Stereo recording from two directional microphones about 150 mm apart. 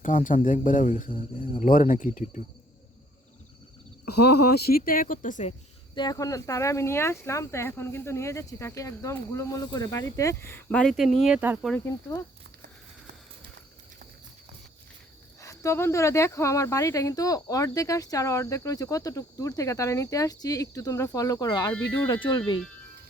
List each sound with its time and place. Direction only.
0.0 s speech: 60° left (ahead or behind)
4.1 s speech: 90° left; by 5.5 s 55° left (ahead or behind)
5.9 s speech: 30° left (ahead or behind); by 11.3 s centre (ahead or behind)
11.3 s speech: 10° right (ahead or behind)
11.9 s speech: 20° left (ahead or behind)
15.4 s speech: 20° left (ahead or behind)